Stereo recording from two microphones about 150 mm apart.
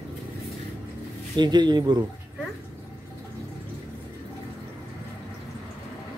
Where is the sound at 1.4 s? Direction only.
30° right (ahead or behind).